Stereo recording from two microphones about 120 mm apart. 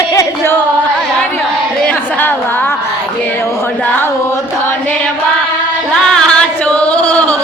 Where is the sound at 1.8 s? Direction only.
15° left (ahead or behind).